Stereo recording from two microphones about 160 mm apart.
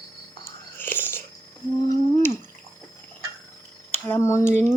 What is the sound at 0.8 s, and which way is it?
Biting, 10° left (ahead or behind).